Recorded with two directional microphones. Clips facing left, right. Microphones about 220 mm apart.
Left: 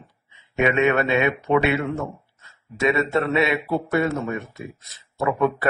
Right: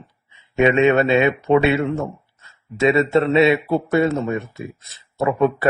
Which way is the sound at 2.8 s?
30° right (ahead or behind).